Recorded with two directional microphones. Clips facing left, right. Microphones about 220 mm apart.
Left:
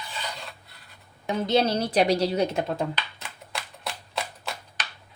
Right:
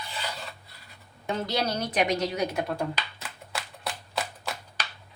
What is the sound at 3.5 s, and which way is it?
Shuffling cards, centre (ahead or behind).